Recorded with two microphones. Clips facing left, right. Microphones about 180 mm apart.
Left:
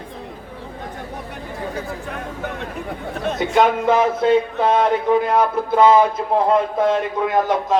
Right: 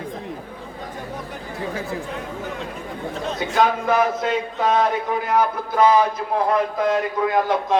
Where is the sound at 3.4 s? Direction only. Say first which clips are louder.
Left 3 dB; 25° left (ahead or behind).